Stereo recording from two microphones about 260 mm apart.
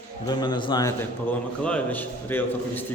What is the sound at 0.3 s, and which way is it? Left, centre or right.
A man's voice, centre.